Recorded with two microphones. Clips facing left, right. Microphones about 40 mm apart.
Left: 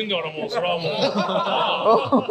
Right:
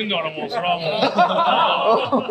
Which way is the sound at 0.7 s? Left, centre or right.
Right.